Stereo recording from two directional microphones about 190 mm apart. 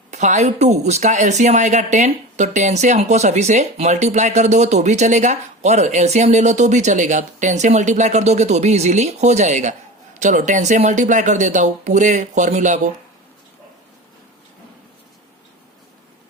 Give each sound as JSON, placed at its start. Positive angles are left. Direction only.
{"t": 0.1, "sound": "a woman's voice", "side_deg": -40}